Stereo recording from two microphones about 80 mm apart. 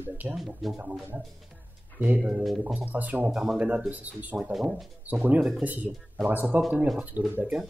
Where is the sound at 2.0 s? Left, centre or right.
Centre.